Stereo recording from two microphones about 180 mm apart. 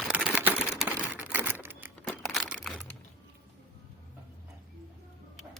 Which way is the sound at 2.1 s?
Centre (ahead or behind).